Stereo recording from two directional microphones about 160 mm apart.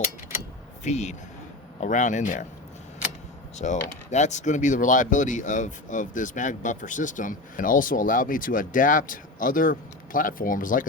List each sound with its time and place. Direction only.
0.9 s speech: 45° left (ahead or behind)
3.6 s speech: 45° left (ahead or behind)